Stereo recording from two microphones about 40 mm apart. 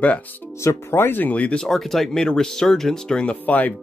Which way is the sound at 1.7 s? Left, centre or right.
Centre.